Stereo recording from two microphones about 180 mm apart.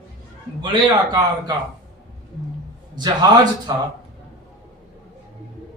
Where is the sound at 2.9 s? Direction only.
25° right (ahead or behind).